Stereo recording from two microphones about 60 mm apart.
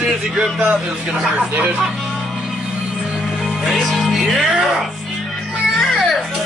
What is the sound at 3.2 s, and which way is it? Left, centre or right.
Music, centre.